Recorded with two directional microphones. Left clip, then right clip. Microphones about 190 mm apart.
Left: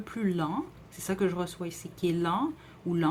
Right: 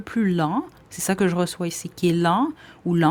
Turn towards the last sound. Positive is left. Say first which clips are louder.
# right 7 dB
turn(degrees=-40)  # may be behind; listen again after turning